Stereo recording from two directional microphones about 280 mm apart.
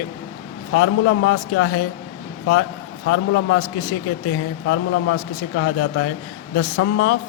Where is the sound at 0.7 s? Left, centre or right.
Left.